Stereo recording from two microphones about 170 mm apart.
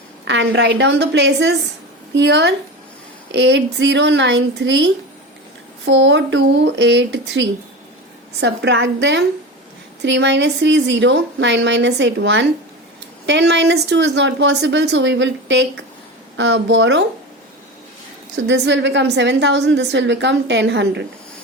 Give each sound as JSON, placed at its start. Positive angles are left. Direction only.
{"t": 0.3, "sound": "a woman's voice", "side_deg": -90}
{"t": 18.4, "sound": "a woman's voice", "side_deg": -90}